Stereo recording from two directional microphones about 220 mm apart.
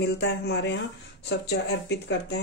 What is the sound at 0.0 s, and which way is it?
Speech, 50° left (ahead or behind).